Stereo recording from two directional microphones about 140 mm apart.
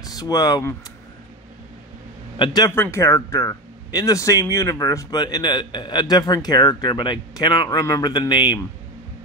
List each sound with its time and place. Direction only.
0.0 s speech: 25° left (ahead or behind)
2.3 s a man's voice: 30° left (ahead or behind)
2.7 s speech: 15° left (ahead or behind); by 8.5 s 35° left (ahead or behind)